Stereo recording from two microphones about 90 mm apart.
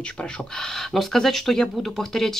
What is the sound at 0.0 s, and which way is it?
Speech, 10° left (ahead or behind).